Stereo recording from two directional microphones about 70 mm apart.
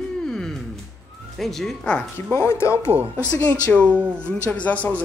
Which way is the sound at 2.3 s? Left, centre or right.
Left.